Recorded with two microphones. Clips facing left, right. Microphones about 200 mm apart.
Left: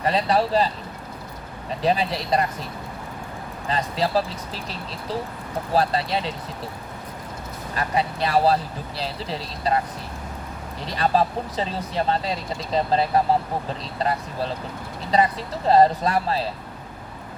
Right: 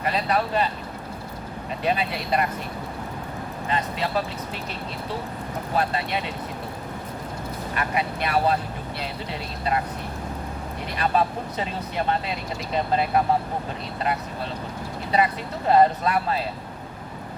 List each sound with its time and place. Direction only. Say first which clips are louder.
0.0 s speech: left 3 dB; 30° left (ahead or behind)
1.8 s speech: left 3 dB; 30° left (ahead or behind)
3.7 s speech: left 3 dB; 30° left (ahead or behind)
5.7 s speech: left 4 dB; 30° left (ahead or behind)
7.8 s speech: left 3 dB; 30° left (ahead or behind)
10.8 s speech: left 2 dB; 30° left (ahead or behind)